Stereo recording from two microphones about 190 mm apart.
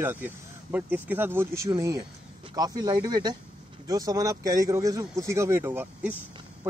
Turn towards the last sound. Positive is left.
turn(degrees=-10)  # may be behind; listen again after turning